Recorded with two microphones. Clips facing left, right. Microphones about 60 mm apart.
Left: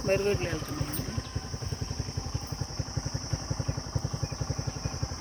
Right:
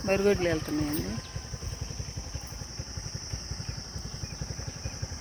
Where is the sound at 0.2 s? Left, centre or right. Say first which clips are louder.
Right 4 dB; right.